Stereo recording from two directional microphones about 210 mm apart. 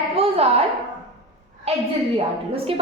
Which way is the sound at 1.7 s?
30° right (ahead or behind).